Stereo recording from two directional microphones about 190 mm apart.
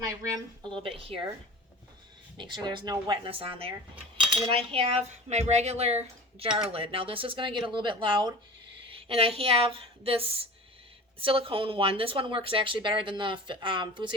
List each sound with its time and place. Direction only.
0.2 s speech: 20° right (ahead or behind)
2.4 s speech: 25° right (ahead or behind)